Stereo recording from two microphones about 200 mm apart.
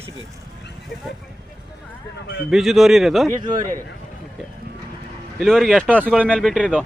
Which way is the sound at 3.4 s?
20° right (ahead or behind).